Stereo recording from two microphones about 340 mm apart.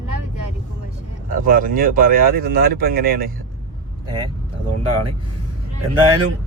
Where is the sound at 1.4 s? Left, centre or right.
Right.